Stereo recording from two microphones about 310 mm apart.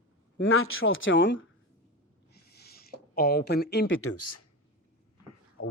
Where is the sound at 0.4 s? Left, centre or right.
Left.